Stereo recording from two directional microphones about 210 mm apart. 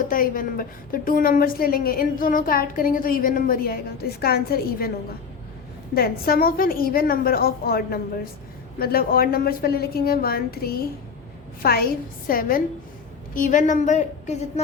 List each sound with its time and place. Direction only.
0.1 s a woman's voice: 40° left (ahead or behind)
5.9 s a woman's voice: 45° left (ahead or behind)